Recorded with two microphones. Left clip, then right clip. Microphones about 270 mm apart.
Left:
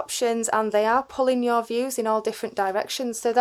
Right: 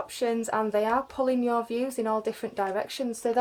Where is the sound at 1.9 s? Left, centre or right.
Left.